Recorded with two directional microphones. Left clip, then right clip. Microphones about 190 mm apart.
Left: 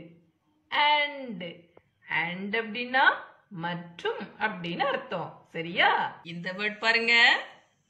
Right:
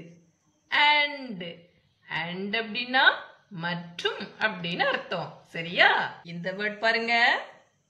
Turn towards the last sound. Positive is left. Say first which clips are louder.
# left 1 dB
turn(degrees=-45)  # may be behind; listen again after turning